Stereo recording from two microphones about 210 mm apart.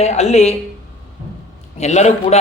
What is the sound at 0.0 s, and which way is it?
Speech, 30° left (ahead or behind).